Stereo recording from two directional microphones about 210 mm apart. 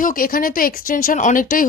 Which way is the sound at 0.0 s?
40° left (ahead or behind).